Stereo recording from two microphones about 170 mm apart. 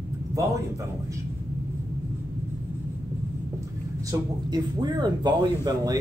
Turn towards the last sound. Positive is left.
turn(degrees=-25)  # may be behind; listen again after turning